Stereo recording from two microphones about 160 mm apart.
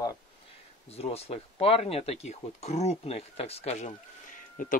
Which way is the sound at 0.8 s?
40° left (ahead or behind).